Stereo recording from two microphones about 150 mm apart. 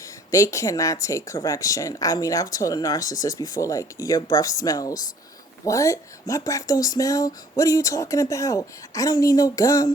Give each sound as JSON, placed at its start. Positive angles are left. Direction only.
{"t": 0.3, "sound": "speech", "side_deg": 20}